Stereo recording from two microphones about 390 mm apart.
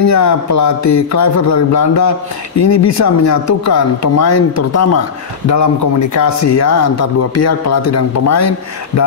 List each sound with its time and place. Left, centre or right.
0.0 s speech: left